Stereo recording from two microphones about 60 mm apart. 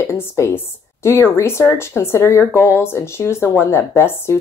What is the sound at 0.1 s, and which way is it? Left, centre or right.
Speech, left.